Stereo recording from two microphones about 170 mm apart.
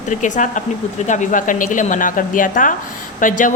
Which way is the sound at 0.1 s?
45° left (ahead or behind).